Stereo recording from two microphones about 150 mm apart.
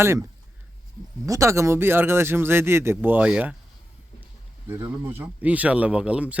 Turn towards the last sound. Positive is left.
turn(degrees=-10)  # may be behind; listen again after turning